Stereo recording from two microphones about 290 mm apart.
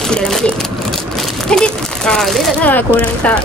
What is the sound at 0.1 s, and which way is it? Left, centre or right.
Speech, centre.